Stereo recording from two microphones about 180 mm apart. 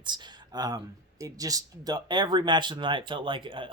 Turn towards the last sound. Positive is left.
turn(degrees=-25)  # may be behind; listen again after turning